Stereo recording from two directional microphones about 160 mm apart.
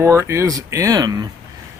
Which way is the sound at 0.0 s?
15° right (ahead or behind).